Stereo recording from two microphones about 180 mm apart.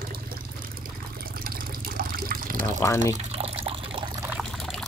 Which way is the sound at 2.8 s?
15° left (ahead or behind).